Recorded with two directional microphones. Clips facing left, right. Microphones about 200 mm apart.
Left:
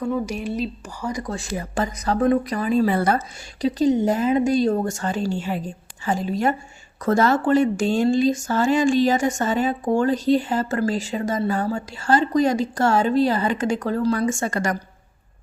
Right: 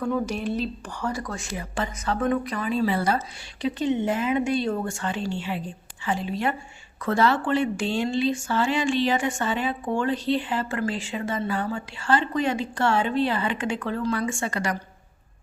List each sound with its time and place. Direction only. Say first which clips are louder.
0.0 s speech: left 1 dB; 10° left (ahead or behind)
1.3 s speech: left 5 dB; 35° left (ahead or behind)